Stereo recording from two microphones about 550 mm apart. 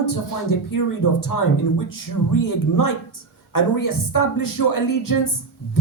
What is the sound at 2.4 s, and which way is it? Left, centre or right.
Speech, left.